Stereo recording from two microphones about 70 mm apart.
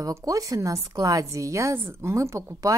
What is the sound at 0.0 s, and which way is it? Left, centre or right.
A woman's voice, right.